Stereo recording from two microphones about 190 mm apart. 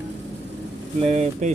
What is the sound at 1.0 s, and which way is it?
Speech, 35° right (ahead or behind).